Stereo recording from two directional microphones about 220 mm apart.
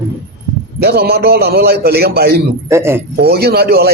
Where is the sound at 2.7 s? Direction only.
10° right (ahead or behind).